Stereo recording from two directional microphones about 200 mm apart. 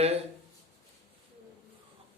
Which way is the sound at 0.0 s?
30° right (ahead or behind).